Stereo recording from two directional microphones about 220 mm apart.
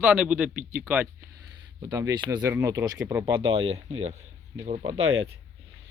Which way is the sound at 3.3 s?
25° right (ahead or behind).